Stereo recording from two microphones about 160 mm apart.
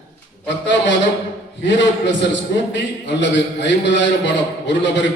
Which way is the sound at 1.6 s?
90° left.